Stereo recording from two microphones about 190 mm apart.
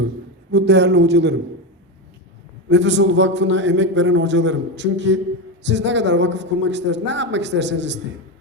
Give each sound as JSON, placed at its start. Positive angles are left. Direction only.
{"t": 0.5, "sound": "a man's voice", "side_deg": -60}
{"t": 2.6, "sound": "a man's voice", "side_deg": -70}